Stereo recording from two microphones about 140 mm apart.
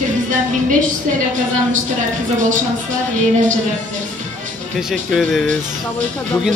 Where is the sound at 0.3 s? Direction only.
65° right (ahead or behind).